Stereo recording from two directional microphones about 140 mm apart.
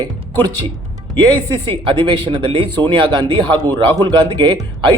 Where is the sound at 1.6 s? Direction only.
40° right (ahead or behind).